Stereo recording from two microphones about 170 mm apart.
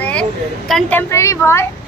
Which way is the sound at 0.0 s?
5° left (ahead or behind).